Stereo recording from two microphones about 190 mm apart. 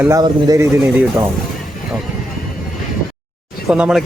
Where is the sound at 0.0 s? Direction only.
20° right (ahead or behind).